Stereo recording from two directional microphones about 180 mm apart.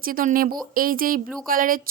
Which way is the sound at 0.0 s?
50° right (ahead or behind).